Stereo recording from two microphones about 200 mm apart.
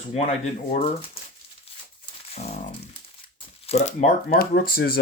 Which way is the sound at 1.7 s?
30° left (ahead or behind).